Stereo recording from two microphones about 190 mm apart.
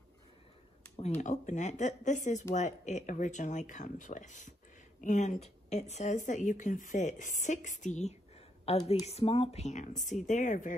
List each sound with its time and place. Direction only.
0.9 s speech: 35° left (ahead or behind)